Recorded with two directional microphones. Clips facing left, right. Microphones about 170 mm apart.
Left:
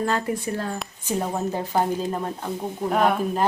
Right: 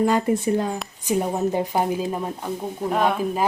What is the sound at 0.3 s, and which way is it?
Speech, 20° right (ahead or behind).